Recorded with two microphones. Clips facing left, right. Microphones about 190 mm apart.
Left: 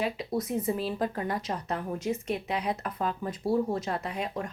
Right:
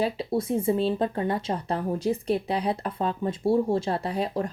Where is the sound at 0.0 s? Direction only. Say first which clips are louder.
Right 4 dB; 30° right (ahead or behind).